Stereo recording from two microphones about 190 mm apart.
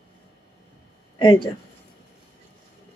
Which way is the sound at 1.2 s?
25° left (ahead or behind).